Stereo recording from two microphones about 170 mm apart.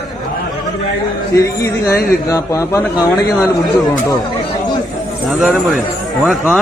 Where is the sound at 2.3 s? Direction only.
20° left (ahead or behind).